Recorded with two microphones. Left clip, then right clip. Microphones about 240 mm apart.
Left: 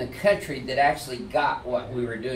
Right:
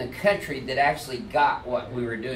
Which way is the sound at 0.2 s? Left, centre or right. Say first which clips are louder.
Left 1 dB; centre.